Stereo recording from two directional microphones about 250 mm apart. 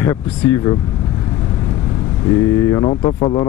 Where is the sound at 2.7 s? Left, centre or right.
Centre.